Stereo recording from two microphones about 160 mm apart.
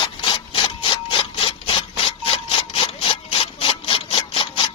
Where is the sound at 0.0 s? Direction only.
30° left (ahead or behind).